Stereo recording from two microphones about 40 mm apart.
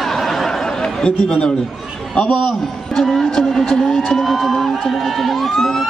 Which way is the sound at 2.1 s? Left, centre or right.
Centre.